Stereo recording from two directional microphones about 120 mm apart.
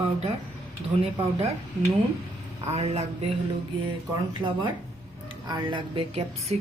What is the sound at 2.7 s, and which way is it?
Speech, 60° right (ahead or behind).